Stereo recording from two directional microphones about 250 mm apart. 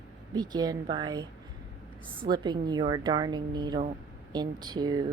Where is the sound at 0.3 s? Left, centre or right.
Centre.